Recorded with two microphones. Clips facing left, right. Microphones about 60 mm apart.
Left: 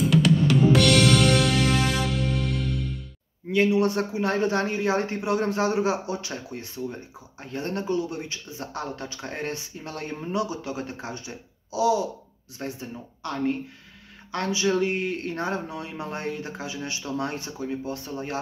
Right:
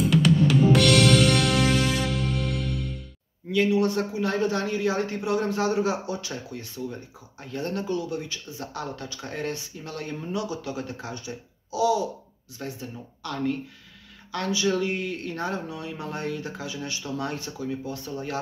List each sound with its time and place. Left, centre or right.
0.0 s music: centre
3.5 s a man's voice: left